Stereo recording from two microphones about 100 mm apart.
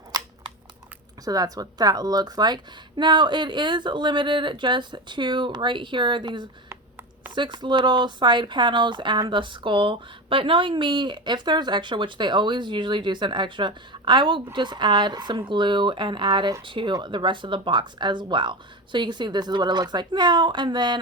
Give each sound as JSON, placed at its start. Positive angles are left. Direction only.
{"t": 0.1, "sound": "scissors", "side_deg": -40}
{"t": 1.2, "sound": "a woman's voice", "side_deg": -40}